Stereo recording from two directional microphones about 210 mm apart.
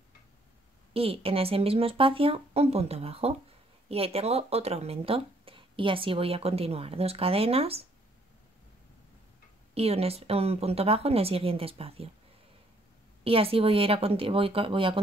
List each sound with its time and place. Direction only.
0.9 s speech: 25° right (ahead or behind)
9.8 s speech: 30° right (ahead or behind)
13.2 s speech: 25° right (ahead or behind)